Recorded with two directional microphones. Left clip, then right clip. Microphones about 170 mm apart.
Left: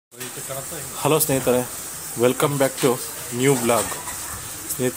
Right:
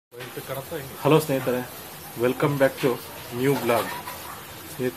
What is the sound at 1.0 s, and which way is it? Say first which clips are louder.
Speech: left 1 dB; 25° left (ahead or behind).